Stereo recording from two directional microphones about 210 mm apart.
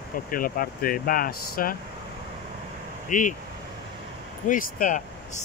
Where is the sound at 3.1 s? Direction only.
40° left (ahead or behind).